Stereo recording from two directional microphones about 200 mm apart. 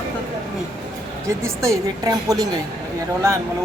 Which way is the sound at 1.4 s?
15° right (ahead or behind).